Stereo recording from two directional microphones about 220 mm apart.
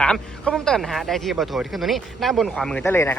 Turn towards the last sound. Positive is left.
turn(degrees=10)  # may be behind; listen again after turning